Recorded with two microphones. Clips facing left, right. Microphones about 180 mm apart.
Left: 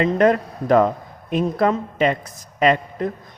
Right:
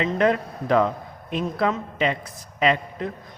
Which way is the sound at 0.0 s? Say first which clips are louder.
Left 4 dB; 45° left (ahead or behind).